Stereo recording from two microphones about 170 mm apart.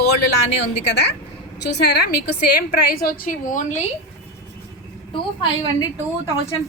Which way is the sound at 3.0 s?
55° left (ahead or behind).